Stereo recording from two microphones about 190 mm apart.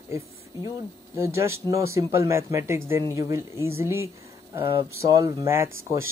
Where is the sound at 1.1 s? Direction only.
15° right (ahead or behind).